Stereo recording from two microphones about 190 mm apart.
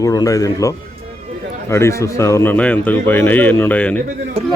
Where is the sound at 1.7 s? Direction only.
15° left (ahead or behind).